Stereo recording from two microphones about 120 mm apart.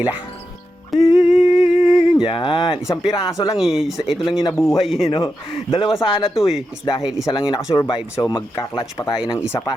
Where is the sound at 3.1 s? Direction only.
25° left (ahead or behind).